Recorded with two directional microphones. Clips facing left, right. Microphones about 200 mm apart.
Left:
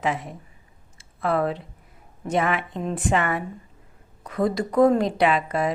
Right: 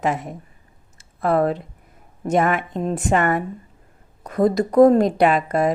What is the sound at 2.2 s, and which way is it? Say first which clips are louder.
A woman's voice: right 4 dB; 45° right (ahead or behind).